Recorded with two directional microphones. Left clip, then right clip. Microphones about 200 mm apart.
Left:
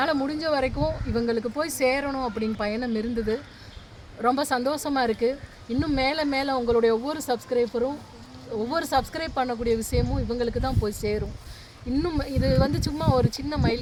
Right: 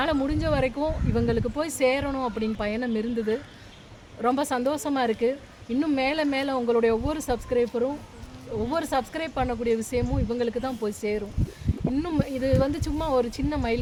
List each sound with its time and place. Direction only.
0.0 s speech: 15° left (ahead or behind)